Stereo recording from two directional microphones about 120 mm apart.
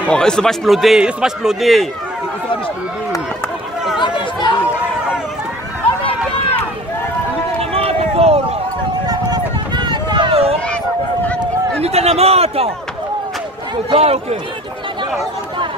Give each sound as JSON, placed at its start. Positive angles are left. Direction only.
{"t": 0.0, "sound": "a man's voice", "side_deg": 5}
{"t": 4.0, "sound": "chatter", "side_deg": 40}
{"t": 7.7, "sound": "run", "side_deg": -55}
{"t": 9.0, "sound": "run", "side_deg": -35}
{"t": 10.3, "sound": "a sound", "side_deg": -55}
{"t": 11.8, "sound": "a sound", "side_deg": -60}
{"t": 13.8, "sound": "a man's voice", "side_deg": -55}